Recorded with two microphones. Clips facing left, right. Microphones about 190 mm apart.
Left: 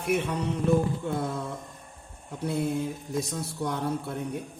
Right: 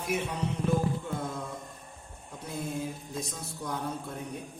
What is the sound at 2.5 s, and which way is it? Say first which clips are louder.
A man's voice: left 6 dB; 65° left (ahead or behind).